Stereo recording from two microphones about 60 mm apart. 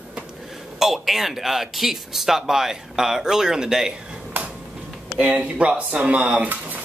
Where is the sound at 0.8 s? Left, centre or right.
Centre.